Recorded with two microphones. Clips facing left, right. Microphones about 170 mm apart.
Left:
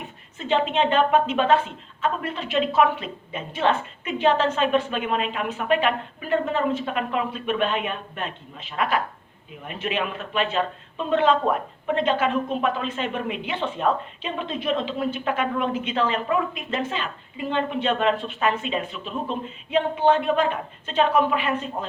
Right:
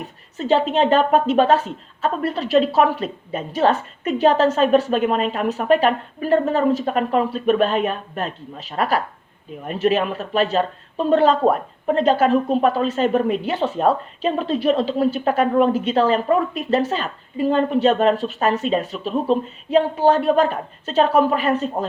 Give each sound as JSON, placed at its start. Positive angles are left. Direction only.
{"t": 0.0, "sound": "speech", "side_deg": -40}